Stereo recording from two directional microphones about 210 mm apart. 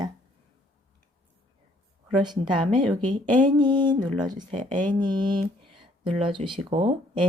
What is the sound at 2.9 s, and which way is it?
Speech, 20° right (ahead or behind).